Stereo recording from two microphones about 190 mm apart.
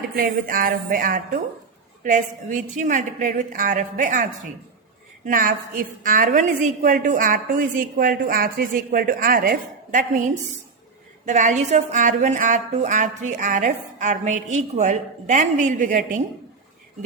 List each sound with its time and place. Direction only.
0.2 s a woman's voice: 50° right (ahead or behind)
11.3 s a woman's voice: 40° right (ahead or behind)